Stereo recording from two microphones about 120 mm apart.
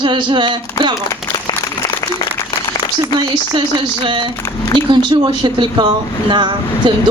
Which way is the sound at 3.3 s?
40° right (ahead or behind).